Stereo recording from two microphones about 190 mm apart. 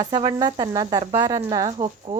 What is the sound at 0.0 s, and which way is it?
A woman's voice, 25° right (ahead or behind).